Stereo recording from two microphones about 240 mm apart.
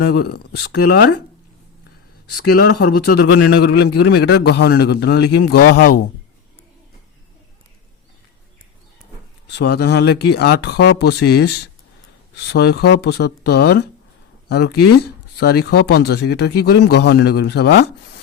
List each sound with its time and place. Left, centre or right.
0.0 s a man's voice: left
2.3 s a man's voice: left
9.5 s speech: left
15.4 s speech: left